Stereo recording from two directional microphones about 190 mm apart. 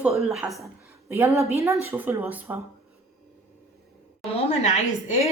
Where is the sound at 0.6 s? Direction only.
15° right (ahead or behind).